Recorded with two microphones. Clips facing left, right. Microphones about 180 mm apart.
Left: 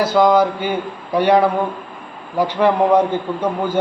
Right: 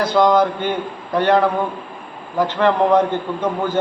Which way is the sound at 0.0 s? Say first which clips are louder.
Left 1 dB; 5° left (ahead or behind).